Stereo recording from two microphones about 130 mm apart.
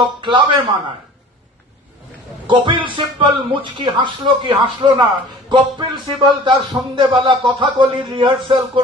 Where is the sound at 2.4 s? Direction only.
40° right (ahead or behind).